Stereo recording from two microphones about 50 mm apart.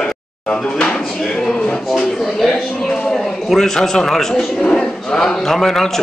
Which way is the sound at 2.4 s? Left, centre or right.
Centre.